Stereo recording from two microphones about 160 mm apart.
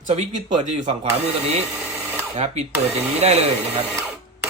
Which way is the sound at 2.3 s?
45° right (ahead or behind).